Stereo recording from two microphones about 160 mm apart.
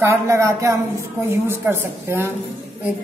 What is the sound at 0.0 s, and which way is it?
A woman's voice, 15° right (ahead or behind).